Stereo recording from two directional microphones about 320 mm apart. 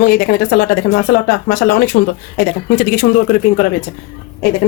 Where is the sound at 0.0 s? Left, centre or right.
Left.